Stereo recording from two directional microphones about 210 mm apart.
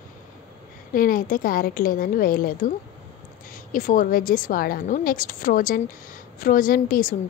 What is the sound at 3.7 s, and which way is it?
A woman's voice, 40° left (ahead or behind).